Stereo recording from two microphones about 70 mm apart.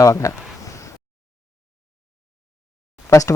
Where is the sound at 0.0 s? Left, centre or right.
Left.